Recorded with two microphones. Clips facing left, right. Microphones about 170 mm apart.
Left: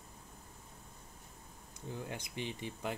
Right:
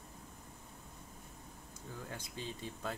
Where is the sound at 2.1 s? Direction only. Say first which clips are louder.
Left 3 dB; 20° left (ahead or behind).